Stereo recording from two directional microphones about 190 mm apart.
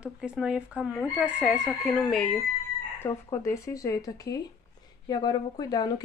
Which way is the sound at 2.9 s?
15° left (ahead or behind).